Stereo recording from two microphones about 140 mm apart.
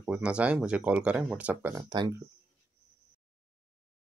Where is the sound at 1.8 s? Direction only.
30° right (ahead or behind).